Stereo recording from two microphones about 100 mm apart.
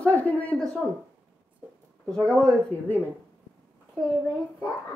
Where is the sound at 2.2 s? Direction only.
5° left (ahead or behind).